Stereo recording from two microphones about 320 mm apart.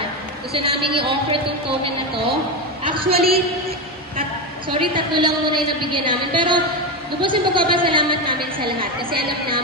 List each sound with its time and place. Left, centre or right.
0.6 s a woman's voice: centre
2.8 s a woman's voice: centre
4.6 s a woman's voice: centre